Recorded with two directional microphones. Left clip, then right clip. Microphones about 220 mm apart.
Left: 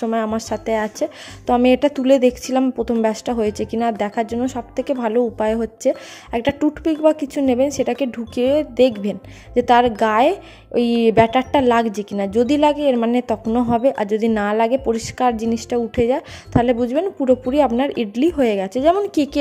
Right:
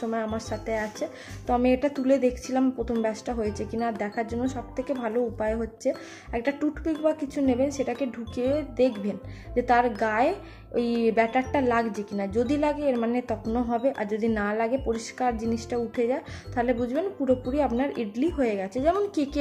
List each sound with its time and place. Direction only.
0.0 s speech: 40° left (ahead or behind)